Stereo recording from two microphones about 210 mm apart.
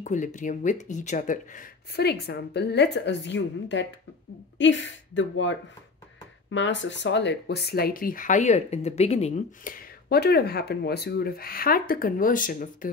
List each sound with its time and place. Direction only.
0.0 s speech: 35° left (ahead or behind)